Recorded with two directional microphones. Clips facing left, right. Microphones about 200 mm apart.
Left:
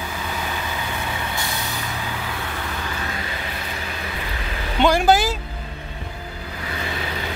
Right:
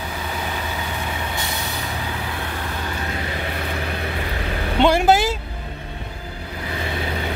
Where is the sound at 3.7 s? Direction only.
60° right (ahead or behind).